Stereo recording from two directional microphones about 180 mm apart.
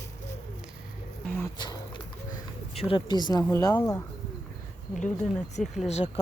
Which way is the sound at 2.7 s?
30° left (ahead or behind).